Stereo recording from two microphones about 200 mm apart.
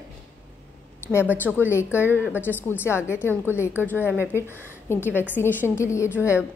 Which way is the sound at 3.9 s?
10° right (ahead or behind).